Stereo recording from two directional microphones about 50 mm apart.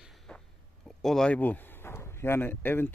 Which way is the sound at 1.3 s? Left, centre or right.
Left.